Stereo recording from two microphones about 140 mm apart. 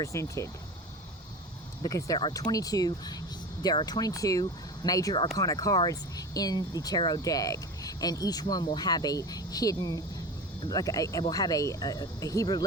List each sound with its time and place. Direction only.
0.0 s speech: 20° left (ahead or behind)
1.8 s speech: 25° left (ahead or behind)